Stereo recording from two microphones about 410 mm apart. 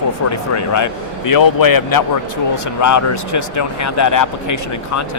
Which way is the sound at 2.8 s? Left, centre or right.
Left.